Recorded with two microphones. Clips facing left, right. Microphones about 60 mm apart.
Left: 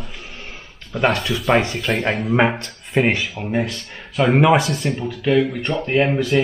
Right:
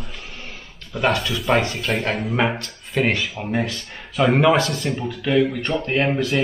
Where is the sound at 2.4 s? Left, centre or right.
Left.